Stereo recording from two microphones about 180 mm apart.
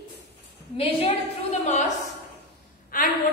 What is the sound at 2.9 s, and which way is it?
Gasp, 50° left (ahead or behind).